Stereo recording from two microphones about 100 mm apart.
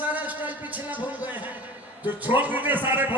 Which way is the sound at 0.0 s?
15° right (ahead or behind).